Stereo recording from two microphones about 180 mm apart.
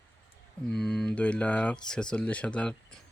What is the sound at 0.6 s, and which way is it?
Speech, 5° left (ahead or behind).